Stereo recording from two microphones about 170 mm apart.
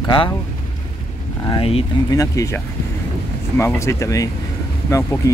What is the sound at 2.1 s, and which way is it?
Speech, 20° left (ahead or behind).